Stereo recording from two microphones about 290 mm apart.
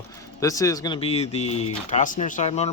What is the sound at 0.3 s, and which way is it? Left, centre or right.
Speech, centre.